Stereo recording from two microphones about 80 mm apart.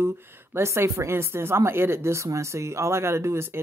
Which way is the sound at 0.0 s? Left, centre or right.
Right.